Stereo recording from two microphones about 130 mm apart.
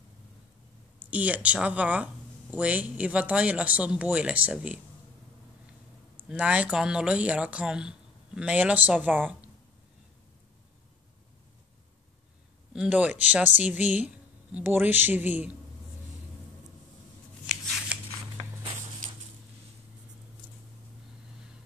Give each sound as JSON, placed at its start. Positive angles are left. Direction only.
{"t": 0.9, "sound": "a woman's voice", "side_deg": -10}
{"t": 6.1, "sound": "a woman's voice", "side_deg": -10}
{"t": 12.7, "sound": "a woman's voice", "side_deg": -10}